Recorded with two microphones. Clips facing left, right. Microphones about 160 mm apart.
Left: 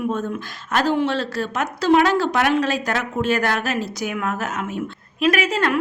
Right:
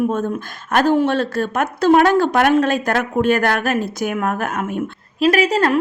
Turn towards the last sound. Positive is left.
turn(degrees=-35)  # may be behind; listen again after turning